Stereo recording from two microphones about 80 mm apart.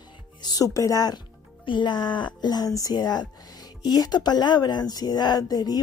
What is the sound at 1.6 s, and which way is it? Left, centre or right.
A woman's voice, left.